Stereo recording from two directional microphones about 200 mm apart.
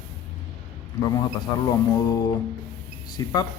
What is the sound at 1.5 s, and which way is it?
Speech, 20° left (ahead or behind).